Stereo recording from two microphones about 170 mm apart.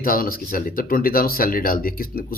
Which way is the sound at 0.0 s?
55° left (ahead or behind).